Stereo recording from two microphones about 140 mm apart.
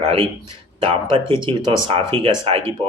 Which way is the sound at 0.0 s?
45° right (ahead or behind).